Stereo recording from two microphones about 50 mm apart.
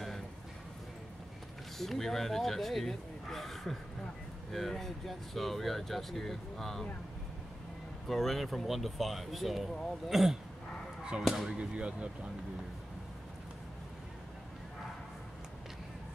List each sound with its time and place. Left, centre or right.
1.8 s speech: centre
8.1 s speech: centre
11.4 s speech: centre